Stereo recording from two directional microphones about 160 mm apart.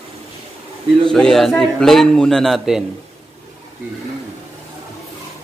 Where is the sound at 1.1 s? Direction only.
5° left (ahead or behind).